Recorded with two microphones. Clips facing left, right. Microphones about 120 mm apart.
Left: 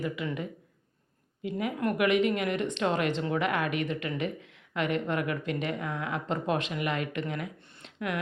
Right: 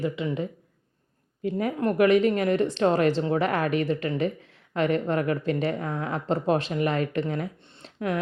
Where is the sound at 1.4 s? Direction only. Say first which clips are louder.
Right 4 dB; 40° right (ahead or behind).